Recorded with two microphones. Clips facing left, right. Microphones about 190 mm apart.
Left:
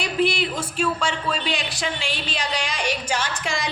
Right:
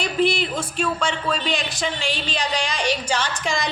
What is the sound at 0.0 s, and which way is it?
A woman's voice, 10° left (ahead or behind).